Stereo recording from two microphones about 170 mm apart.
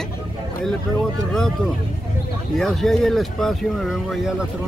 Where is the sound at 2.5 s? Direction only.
Centre (ahead or behind).